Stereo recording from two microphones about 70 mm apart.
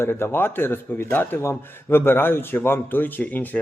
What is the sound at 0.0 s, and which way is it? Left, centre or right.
Speech, left.